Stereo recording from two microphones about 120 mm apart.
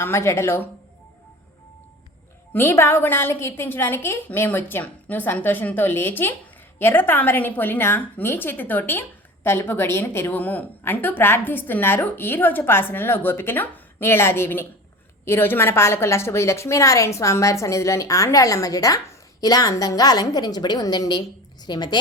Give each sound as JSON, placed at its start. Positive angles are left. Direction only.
{"t": 0.0, "sound": "a woman's voice", "side_deg": 20}
{"t": 2.5, "sound": "a woman's voice", "side_deg": 20}